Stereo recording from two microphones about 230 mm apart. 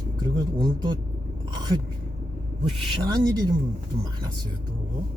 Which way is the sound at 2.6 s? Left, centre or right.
Centre.